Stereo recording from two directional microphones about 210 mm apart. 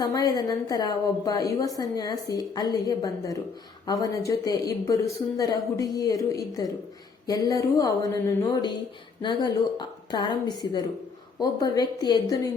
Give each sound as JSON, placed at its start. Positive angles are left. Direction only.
{"t": 0.0, "sound": "a woman's voice", "side_deg": 15}